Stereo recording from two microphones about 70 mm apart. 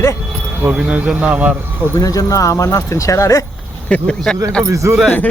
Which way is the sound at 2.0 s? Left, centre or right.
Left.